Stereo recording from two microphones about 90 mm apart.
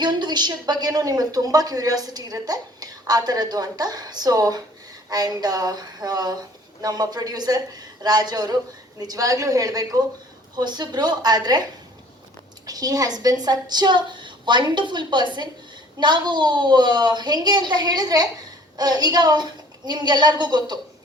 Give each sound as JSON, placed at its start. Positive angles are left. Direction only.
{"t": 0.0, "sound": "a woman's voice", "side_deg": -55}
{"t": 10.5, "sound": "a woman's voice", "side_deg": -50}
{"t": 12.6, "sound": "a woman's voice", "side_deg": -45}